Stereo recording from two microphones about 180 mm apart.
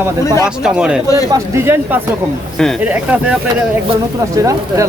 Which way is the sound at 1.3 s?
15° right (ahead or behind).